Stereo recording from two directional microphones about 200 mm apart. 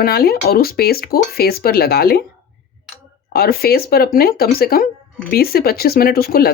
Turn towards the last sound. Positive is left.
turn(degrees=50)  # may be behind; listen again after turning